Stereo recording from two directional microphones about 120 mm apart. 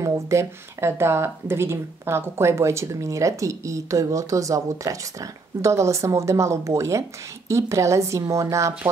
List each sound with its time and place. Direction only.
0.0 s speech: 25° right (ahead or behind)